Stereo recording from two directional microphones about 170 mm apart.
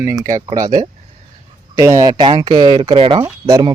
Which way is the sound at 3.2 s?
20° right (ahead or behind).